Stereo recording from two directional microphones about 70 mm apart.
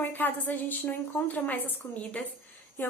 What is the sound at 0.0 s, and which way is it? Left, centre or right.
A woman's voice, left.